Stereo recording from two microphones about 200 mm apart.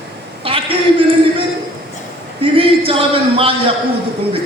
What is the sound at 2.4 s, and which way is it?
A man's voice, 25° right (ahead or behind).